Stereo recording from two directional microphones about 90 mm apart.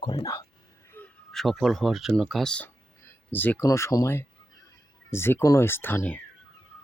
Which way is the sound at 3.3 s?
20° left (ahead or behind).